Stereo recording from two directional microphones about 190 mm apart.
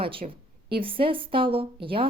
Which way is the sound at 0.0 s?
30° right (ahead or behind).